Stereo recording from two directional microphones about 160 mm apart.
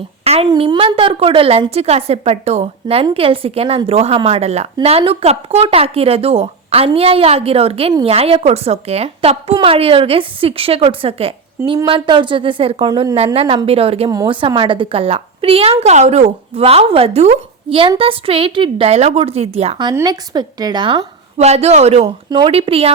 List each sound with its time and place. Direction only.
0.5 s a woman's voice: 30° right (ahead or behind)
14.1 s a woman's voice: 25° right (ahead or behind)
19.8 s a woman's voice: 25° right (ahead or behind); by 22.1 s 40° right (ahead or behind)
22.3 s a woman's voice: 30° right (ahead or behind)